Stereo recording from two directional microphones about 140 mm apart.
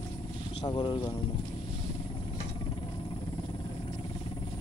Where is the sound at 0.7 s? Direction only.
35° left (ahead or behind).